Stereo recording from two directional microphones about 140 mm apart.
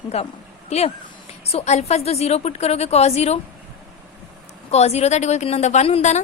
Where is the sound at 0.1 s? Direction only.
45° left (ahead or behind).